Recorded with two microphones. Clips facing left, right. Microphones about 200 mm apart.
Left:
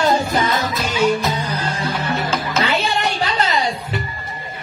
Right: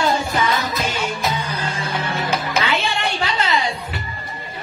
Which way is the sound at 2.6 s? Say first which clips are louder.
Left 2 dB; 40° left (ahead or behind).